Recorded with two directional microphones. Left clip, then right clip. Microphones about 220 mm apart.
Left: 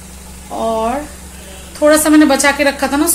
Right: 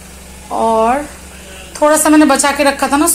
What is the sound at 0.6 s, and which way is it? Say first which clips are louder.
A woman's voice: right 5 dB; 10° right (ahead or behind).